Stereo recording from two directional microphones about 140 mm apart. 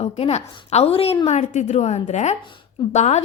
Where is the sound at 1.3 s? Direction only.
60° left (ahead or behind).